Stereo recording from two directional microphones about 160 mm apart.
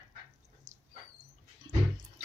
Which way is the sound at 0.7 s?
50° right (ahead or behind).